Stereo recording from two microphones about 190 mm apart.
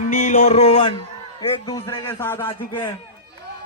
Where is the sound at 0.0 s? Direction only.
40° left (ahead or behind).